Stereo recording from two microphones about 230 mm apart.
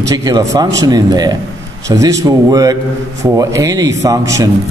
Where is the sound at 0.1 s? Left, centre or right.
Centre.